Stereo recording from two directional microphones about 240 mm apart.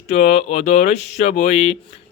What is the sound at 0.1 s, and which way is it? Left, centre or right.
A man's voice, left.